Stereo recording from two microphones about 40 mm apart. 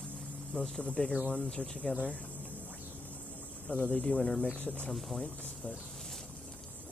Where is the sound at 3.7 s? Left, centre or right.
Left.